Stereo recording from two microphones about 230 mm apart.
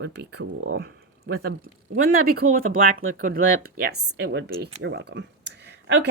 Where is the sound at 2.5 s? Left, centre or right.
Right.